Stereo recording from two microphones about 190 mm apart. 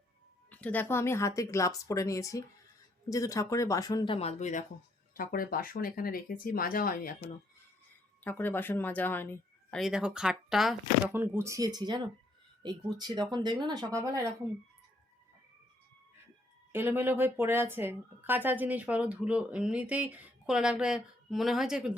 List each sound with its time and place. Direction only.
0.5 s speech: 10° left (ahead or behind); by 4.6 s 40° left (ahead or behind)
5.1 s speech: 50° left (ahead or behind)
8.2 s speech: 10° left (ahead or behind)
11.1 s a woman's voice: 15° right (ahead or behind)
16.7 s a woman's voice: 10° right (ahead or behind)